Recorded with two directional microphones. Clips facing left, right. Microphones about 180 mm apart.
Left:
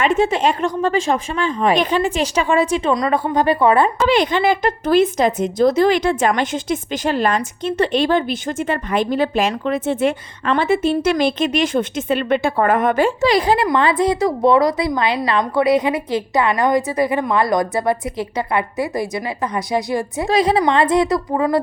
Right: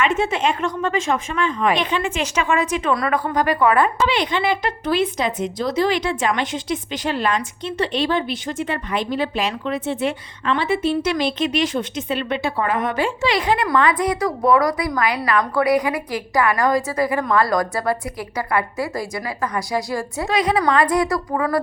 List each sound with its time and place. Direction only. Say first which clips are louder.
0.0 s speech: left 4 dB; 35° left (ahead or behind)
2.9 s a woman's voice: left 3 dB; 20° left (ahead or behind)
4.1 s a woman's voice: left 5 dB; 45° left (ahead or behind); by 20.2 s 20° left (ahead or behind)
20.2 s a woman's voice: left 3 dB; 30° left (ahead or behind)